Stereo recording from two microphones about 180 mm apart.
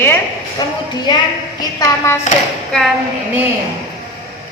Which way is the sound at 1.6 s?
15° left (ahead or behind).